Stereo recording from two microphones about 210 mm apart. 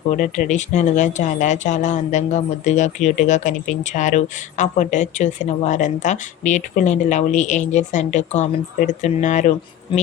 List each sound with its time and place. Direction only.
0.2 s speech: 35° left (ahead or behind)